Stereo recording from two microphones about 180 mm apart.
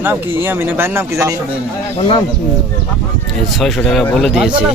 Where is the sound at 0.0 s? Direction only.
10° right (ahead or behind).